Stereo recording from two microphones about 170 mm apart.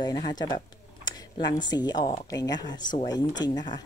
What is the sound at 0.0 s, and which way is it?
Speech, 25° left (ahead or behind).